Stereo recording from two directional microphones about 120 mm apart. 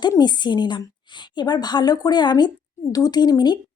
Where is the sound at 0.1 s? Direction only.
35° left (ahead or behind).